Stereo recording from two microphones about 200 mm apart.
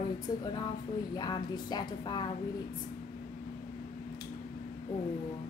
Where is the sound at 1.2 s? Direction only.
20° left (ahead or behind).